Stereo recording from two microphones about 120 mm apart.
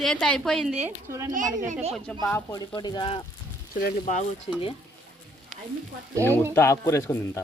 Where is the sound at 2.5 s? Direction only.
35° left (ahead or behind).